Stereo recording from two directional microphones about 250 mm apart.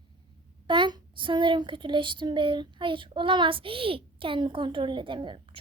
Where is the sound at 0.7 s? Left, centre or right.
Centre.